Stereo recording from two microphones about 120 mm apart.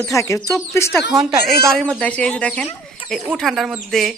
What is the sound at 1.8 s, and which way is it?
Speech, 5° left (ahead or behind).